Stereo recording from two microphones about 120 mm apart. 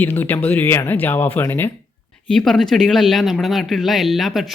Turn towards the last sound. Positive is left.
turn(degrees=0)  # may be behind; listen again after turning